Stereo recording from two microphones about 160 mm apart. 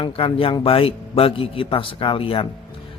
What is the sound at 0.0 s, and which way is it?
A man's voice, 35° left (ahead or behind).